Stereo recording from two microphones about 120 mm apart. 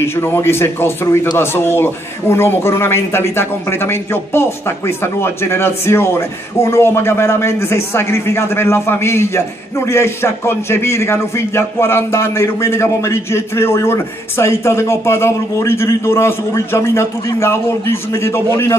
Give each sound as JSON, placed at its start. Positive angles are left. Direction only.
{"t": 0.0, "sound": "a man's voice", "side_deg": 20}